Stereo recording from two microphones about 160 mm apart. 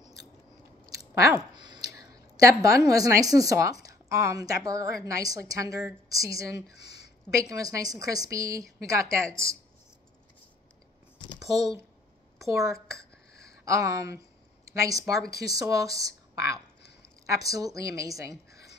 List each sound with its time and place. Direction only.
0.8 s chewing: 20° right (ahead or behind)
2.0 s a sound: 20° right (ahead or behind)
2.9 s a woman's voice: 20° right (ahead or behind)
6.8 s a sound: 90° left
7.2 s a woman's voice: 20° right (ahead or behind)
11.3 s a sound: 20° right (ahead or behind)
12.4 s speech: 20° right (ahead or behind)
13.7 s a woman's voice: 20° right (ahead or behind)
15.3 s speech: 90° left
15.6 s a woman's voice: 20° right (ahead or behind)